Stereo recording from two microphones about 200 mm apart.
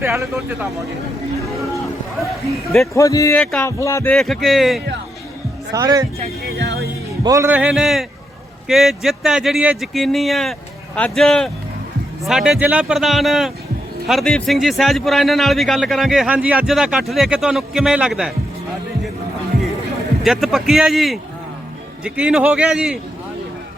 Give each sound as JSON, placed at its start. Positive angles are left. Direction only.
{"t": 0.0, "sound": "speech", "side_deg": -10}
{"t": 1.5, "sound": "a sound", "side_deg": 0}
{"t": 2.8, "sound": "a man's voice", "side_deg": 15}
{"t": 5.7, "sound": "speech", "side_deg": -20}
{"t": 6.6, "sound": "music", "side_deg": -60}
{"t": 7.3, "sound": "a man's voice", "side_deg": -10}
{"t": 20.2, "sound": "a man's voice", "side_deg": 0}